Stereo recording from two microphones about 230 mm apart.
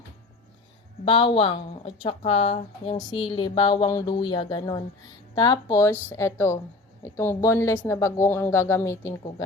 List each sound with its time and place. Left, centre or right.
1.0 s a woman's voice: left